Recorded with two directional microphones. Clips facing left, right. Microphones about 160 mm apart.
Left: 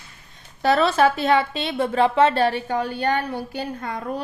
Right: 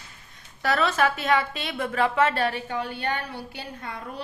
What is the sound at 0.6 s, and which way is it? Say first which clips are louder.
A woman's voice: left 6 dB; 30° left (ahead or behind).